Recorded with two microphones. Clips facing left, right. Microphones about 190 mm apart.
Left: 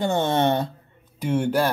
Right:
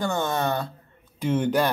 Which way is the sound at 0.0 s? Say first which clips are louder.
Left 4 dB; 25° left (ahead or behind).